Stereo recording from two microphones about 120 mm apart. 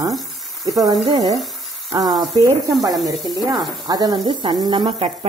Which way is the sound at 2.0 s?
Centre (ahead or behind).